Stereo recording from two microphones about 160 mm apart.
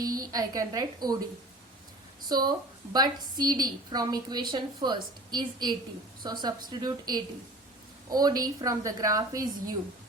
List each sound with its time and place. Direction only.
0.0 s a woman's voice: 25° right (ahead or behind)
2.3 s a woman's voice: 25° right (ahead or behind)